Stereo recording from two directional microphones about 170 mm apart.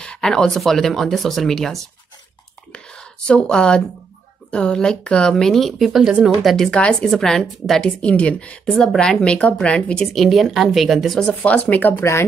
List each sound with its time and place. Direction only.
0.0 s a woman's voice: 5° left (ahead or behind)
2.7 s whispering: 5° left (ahead or behind)
4.5 s a woman's voice: 5° left (ahead or behind)